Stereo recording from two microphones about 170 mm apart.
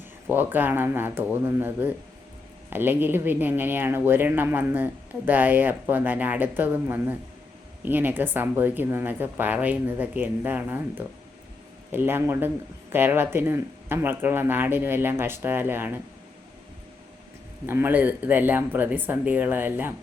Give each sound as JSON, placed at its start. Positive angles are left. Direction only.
{"t": 0.3, "sound": "speech", "side_deg": -10}
{"t": 17.7, "sound": "speech", "side_deg": -15}